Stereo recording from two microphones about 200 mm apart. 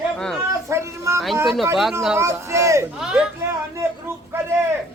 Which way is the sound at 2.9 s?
5° right (ahead or behind).